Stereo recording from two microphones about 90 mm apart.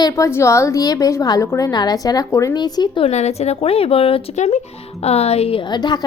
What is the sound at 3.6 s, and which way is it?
Speech, 90° left.